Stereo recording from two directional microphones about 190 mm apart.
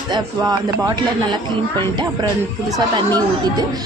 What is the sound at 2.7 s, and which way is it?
Speech, 20° right (ahead or behind).